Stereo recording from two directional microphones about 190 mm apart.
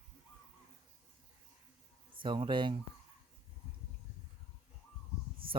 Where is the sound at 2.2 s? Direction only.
25° right (ahead or behind).